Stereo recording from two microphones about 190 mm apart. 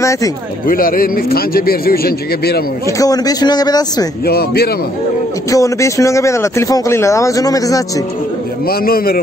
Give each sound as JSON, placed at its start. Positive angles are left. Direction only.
{"t": 0.0, "sound": "speech", "side_deg": 15}
{"t": 0.7, "sound": "a man's voice", "side_deg": 50}
{"t": 3.0, "sound": "a man's voice", "side_deg": 20}
{"t": 4.3, "sound": "a man's voice", "side_deg": 55}
{"t": 5.5, "sound": "speech", "side_deg": 15}
{"t": 8.6, "sound": "a man's voice", "side_deg": 50}